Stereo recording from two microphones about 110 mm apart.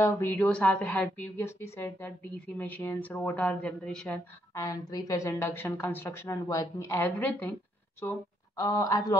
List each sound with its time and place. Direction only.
0.0 s a woman's voice: 25° left (ahead or behind); by 4.2 s 10° left (ahead or behind)
4.6 s a woman's voice: 30° left (ahead or behind); by 7.5 s 15° left (ahead or behind)
8.0 s speech: 30° left (ahead or behind)